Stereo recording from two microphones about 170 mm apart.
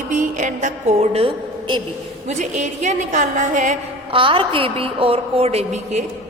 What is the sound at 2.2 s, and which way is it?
A woman's voice, 45° right (ahead or behind).